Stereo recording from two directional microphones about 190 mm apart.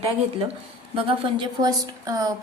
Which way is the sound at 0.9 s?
30° right (ahead or behind).